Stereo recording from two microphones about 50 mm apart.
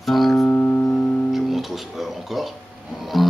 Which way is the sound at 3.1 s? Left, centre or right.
Centre.